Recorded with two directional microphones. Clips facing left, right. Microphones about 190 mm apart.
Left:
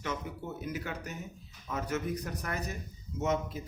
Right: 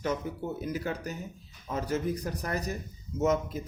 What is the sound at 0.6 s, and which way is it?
Speech, 35° right (ahead or behind).